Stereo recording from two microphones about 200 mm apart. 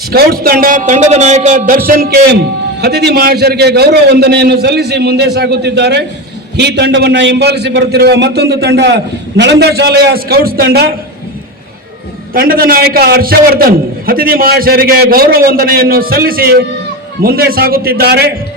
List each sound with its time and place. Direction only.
0.1 s a man's voice: 50° right (ahead or behind)
12.3 s a man's voice: 45° right (ahead or behind)